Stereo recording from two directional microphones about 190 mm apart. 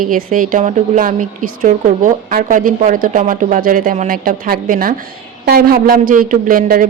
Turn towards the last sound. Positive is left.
turn(degrees=-50)  # may be behind; listen again after turning